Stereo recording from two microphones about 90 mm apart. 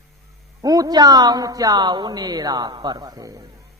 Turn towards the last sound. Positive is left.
turn(degrees=-45)  # may be behind; listen again after turning